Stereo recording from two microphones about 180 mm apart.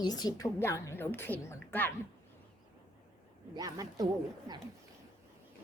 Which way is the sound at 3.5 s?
20° right (ahead or behind).